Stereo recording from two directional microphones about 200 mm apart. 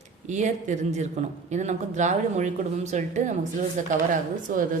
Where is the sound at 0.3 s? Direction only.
35° right (ahead or behind).